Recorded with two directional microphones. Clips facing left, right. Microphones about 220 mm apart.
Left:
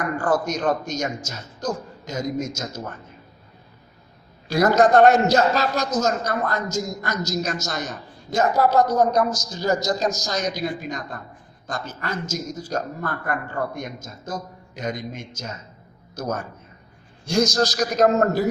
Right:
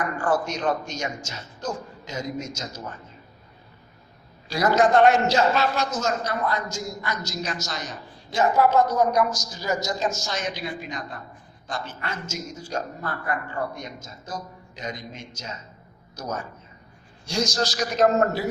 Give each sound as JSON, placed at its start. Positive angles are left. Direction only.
{"t": 0.2, "sound": "speech", "side_deg": 40}
{"t": 4.4, "sound": "a man's voice", "side_deg": 45}